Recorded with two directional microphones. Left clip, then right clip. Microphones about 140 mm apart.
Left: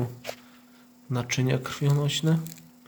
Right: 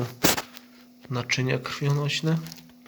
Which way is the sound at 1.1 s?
20° left (ahead or behind).